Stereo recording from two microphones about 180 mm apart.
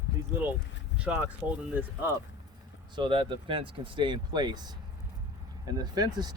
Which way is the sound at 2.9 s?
30° right (ahead or behind).